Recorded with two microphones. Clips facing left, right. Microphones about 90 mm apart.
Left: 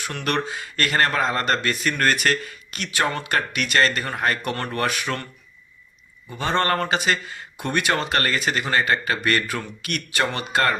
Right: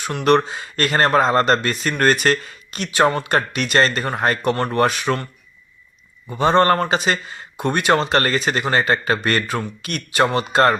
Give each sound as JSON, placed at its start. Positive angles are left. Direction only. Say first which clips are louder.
{"t": 0.0, "sound": "a man's voice", "louder": "right 9 dB", "side_deg": -25}
{"t": 6.3, "sound": "a man's voice", "louder": "right 7 dB", "side_deg": -20}